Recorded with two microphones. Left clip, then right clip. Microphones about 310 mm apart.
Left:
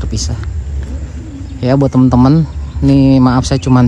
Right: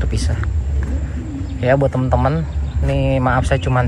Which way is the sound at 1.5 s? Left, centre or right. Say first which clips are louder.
Left 4 dB; centre.